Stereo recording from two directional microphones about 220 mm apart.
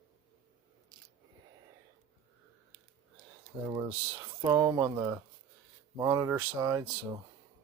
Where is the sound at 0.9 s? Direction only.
15° right (ahead or behind).